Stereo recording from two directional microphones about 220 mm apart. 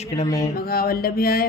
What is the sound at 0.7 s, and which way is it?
Mantra, 45° left (ahead or behind).